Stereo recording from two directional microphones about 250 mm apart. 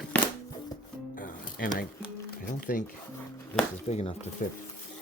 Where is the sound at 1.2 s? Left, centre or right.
Left.